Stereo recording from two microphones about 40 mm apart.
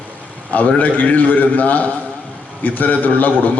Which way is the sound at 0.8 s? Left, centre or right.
Left.